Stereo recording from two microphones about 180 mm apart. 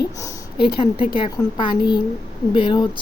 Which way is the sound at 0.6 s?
30° left (ahead or behind).